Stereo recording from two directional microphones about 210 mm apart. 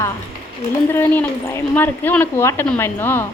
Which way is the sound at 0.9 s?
10° left (ahead or behind).